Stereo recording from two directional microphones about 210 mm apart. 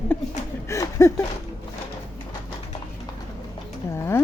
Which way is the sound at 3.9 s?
10° left (ahead or behind).